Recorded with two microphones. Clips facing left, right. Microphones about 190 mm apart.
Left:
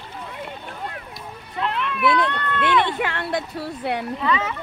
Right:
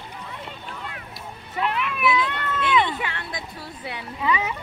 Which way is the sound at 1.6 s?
10° right (ahead or behind).